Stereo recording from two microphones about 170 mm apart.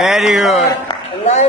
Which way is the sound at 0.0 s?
Centre (ahead or behind).